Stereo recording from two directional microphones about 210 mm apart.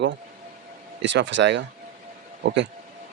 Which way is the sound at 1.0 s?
60° right (ahead or behind).